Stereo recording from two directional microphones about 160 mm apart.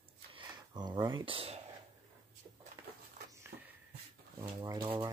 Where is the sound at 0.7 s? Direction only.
25° right (ahead or behind).